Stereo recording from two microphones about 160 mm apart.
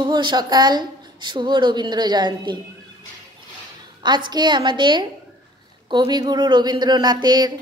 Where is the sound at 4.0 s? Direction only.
30° right (ahead or behind).